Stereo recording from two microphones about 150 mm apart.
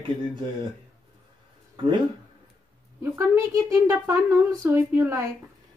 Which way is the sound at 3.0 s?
15° right (ahead or behind).